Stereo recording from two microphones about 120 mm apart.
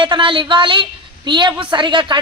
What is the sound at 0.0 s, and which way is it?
A woman's voice, 45° right (ahead or behind).